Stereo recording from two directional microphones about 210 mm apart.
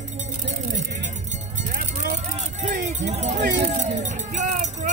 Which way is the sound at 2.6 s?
35° right (ahead or behind).